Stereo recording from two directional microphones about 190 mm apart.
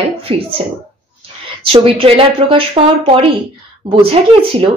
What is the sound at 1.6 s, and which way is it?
Speech, 30° right (ahead or behind).